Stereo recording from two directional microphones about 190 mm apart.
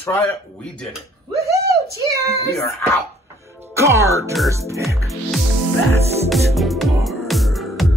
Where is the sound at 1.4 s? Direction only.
15° right (ahead or behind).